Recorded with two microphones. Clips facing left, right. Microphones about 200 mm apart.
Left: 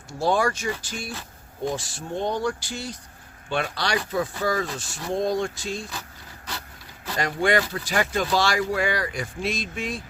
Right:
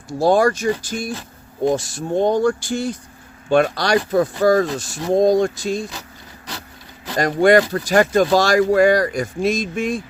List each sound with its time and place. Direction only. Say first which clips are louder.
0.2 s speech: right 7 dB; 40° right (ahead or behind)
7.2 s speech: right 9 dB; 40° right (ahead or behind)